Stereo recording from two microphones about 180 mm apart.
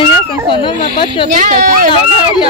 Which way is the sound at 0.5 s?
25° left (ahead or behind).